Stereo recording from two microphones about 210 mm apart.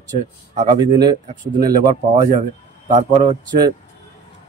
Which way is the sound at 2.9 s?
35° right (ahead or behind).